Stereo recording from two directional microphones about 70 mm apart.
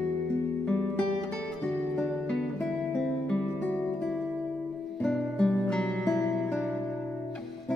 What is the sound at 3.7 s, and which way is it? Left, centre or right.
Music, left.